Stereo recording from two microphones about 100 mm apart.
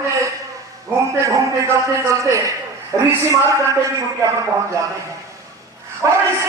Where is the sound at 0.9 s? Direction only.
30° right (ahead or behind).